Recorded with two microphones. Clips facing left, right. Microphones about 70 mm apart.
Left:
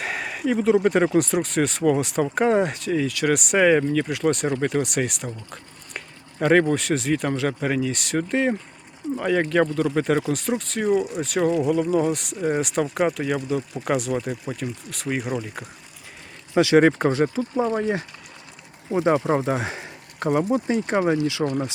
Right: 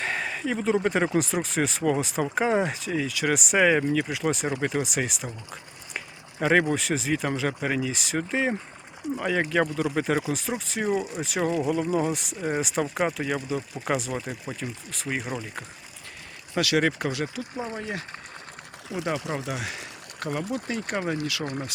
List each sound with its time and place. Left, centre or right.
0.0 s speech: centre
16.6 s speech: left
19.3 s speech: left